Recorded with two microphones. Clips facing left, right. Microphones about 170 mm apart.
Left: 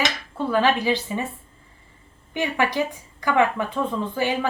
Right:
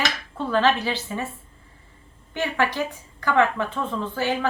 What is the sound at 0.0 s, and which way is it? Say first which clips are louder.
Speech: left 2 dB; 10° left (ahead or behind).